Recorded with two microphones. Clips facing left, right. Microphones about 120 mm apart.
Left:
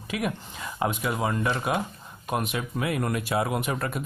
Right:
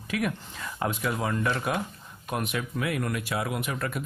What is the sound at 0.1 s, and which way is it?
Speech, 15° left (ahead or behind).